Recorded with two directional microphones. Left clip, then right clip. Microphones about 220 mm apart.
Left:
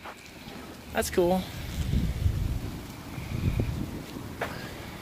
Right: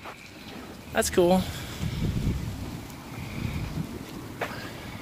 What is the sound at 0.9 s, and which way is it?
Speech, 20° right (ahead or behind).